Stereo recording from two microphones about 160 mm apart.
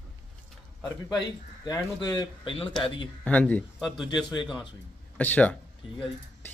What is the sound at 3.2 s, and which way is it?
Speech, 10° left (ahead or behind).